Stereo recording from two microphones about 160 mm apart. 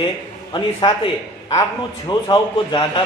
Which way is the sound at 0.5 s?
30° left (ahead or behind).